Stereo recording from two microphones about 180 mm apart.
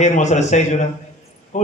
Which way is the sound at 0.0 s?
40° left (ahead or behind).